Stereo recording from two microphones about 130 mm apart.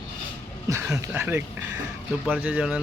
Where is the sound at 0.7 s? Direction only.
20° right (ahead or behind).